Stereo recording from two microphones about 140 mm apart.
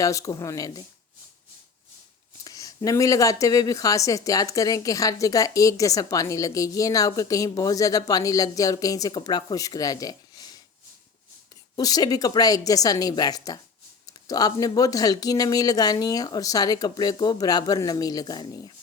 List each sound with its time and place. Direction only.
0.0 s speech: 25° left (ahead or behind)
2.4 s speech: 25° left (ahead or behind)
11.8 s speech: 25° left (ahead or behind)